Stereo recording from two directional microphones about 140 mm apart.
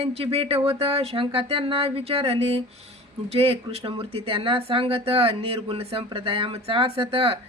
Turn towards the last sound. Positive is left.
turn(degrees=-40)  # may be behind; listen again after turning